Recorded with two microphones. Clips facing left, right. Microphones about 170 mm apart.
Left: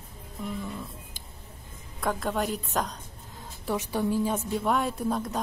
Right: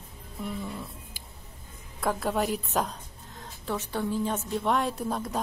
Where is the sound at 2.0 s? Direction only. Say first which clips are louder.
Right 1 dB; 5° right (ahead or behind).